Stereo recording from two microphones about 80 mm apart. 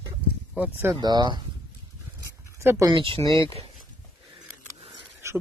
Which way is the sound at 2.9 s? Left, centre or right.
Right.